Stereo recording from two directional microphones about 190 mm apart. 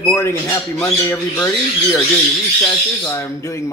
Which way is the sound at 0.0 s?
10° left (ahead or behind).